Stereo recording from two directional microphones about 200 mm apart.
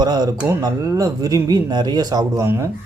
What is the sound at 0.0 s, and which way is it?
Speech, 20° right (ahead or behind).